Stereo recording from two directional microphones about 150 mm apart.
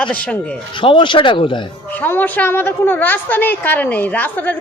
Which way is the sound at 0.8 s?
35° left (ahead or behind).